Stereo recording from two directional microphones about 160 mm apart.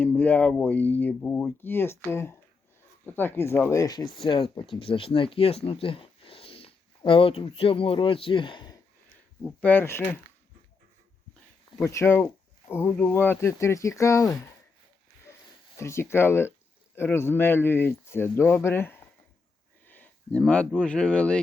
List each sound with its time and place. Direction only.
0.0 s speech: 10° left (ahead or behind)
4.2 s speech: 35° left (ahead or behind)
9.4 s speech: 10° left (ahead or behind)
11.8 s speech: 15° left (ahead or behind)
15.8 s speech: 15° left (ahead or behind)